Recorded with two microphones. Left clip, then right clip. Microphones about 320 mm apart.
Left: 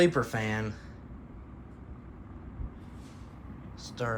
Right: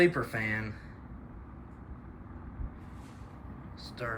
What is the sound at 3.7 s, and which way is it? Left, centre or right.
Vehicle, centre.